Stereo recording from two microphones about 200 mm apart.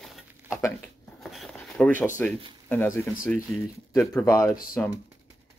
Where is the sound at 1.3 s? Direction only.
Centre (ahead or behind).